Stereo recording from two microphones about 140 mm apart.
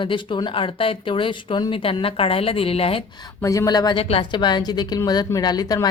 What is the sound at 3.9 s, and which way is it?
A woman's voice, 40° left (ahead or behind).